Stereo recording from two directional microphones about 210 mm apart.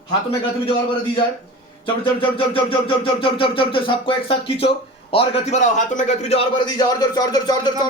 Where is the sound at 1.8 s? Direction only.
25° left (ahead or behind).